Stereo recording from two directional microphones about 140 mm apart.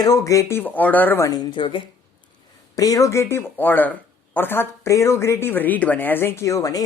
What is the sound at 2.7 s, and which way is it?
Speech, 25° left (ahead or behind).